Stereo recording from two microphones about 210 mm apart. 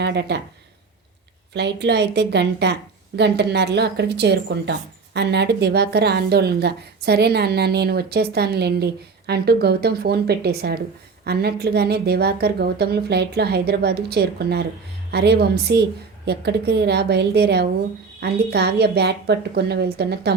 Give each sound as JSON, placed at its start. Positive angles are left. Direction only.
{"t": 0.0, "sound": "speech", "side_deg": -55}
{"t": 1.5, "sound": "a woman's voice", "side_deg": -55}